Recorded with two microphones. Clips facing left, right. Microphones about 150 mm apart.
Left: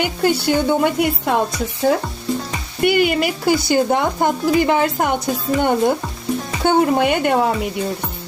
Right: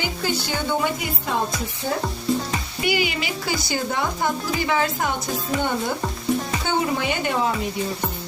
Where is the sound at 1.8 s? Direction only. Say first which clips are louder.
Left 10 dB; 85° left.